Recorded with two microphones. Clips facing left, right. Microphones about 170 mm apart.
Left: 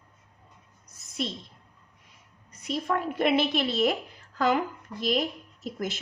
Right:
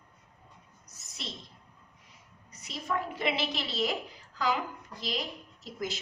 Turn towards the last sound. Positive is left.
turn(degrees=50)  # may be behind; listen again after turning